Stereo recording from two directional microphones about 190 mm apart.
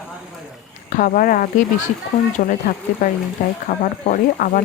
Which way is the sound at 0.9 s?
45° left (ahead or behind).